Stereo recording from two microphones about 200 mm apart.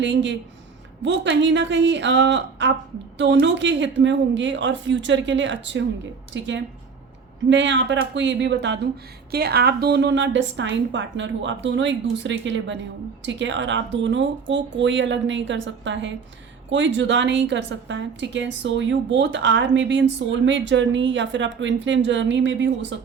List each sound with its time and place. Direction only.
0.0 s a woman's voice: 65° right (ahead or behind)
9.3 s a woman's voice: 50° right (ahead or behind)